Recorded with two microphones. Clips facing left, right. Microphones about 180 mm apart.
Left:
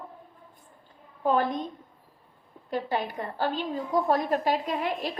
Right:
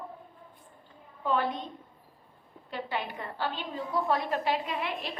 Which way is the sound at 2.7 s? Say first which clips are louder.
Left 5 dB; 40° left (ahead or behind).